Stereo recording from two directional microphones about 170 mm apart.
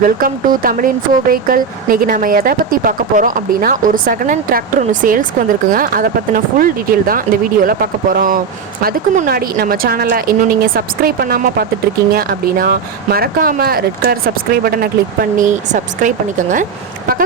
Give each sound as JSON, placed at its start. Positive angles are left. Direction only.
{"t": 0.0, "sound": "speech", "side_deg": -55}